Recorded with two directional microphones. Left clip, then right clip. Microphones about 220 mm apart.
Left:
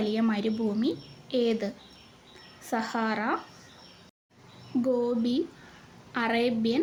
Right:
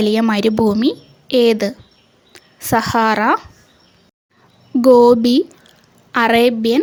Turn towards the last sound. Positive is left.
turn(degrees=-50)  # may be behind; listen again after turning